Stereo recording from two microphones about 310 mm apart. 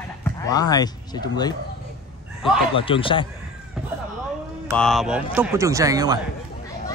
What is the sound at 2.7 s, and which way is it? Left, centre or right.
Speech, centre.